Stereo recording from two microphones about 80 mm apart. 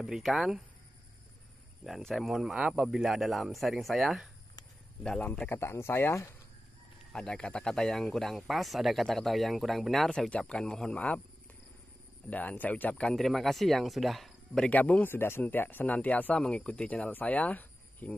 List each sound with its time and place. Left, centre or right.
0.0 s speech: centre
1.9 s speech: centre
5.2 s speech: centre
5.6 s speech: left
7.1 s speech: centre
12.3 s speech: centre
13.0 s speech: centre
14.6 s speech: centre